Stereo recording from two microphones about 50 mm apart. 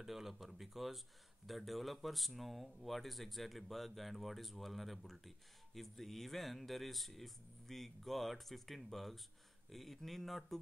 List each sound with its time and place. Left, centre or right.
0.0 s speech: centre